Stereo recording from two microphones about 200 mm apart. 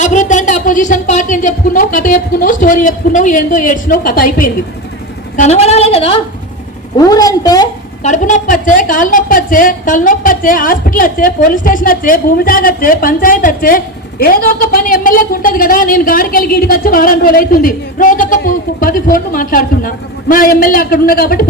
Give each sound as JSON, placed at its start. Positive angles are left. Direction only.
{"t": 0.0, "sound": "speech", "side_deg": 40}
{"t": 5.4, "sound": "speech", "side_deg": 35}
{"t": 6.9, "sound": "a woman's voice", "side_deg": 20}
{"t": 8.0, "sound": "a woman's voice", "side_deg": 40}